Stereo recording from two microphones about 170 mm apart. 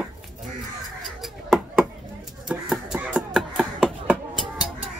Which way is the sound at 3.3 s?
5° right (ahead or behind).